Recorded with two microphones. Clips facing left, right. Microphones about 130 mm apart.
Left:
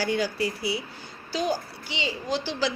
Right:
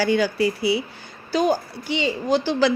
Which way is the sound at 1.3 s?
55° right (ahead or behind).